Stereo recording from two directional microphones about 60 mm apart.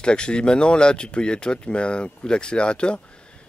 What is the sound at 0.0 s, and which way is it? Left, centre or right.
Speech, centre.